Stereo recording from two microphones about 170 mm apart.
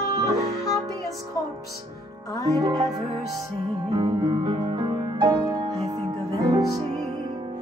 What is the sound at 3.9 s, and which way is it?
Music, 30° right (ahead or behind).